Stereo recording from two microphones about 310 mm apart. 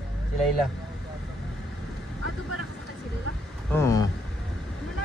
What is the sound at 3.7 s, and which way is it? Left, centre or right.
Vehicle, centre.